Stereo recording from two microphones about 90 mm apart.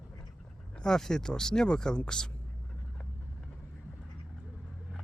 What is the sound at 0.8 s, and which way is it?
Speech, 5° left (ahead or behind).